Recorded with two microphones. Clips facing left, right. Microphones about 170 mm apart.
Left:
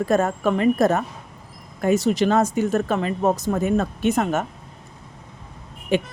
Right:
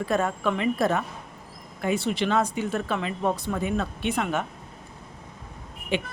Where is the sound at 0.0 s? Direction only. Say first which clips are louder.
Left 5 dB; 45° left (ahead or behind).